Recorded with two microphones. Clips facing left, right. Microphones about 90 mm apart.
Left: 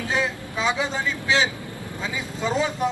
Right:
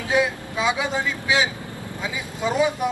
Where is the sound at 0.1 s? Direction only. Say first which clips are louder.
Right 6 dB; 15° right (ahead or behind).